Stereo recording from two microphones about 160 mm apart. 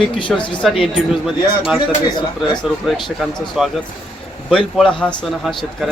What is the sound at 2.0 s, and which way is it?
Speech, 30° left (ahead or behind).